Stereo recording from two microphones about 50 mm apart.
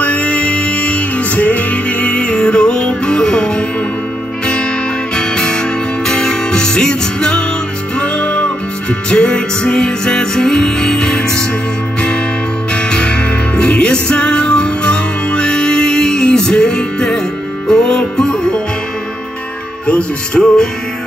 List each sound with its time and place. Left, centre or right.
0.0 s music: left
5.1 s music: centre
12.7 s music: centre
19.9 s music: left